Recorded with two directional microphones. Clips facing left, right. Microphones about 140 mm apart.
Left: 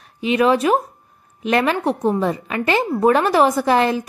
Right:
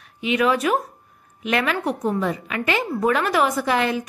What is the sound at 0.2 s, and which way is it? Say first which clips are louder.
A woman's voice: left 4 dB; 35° left (ahead or behind).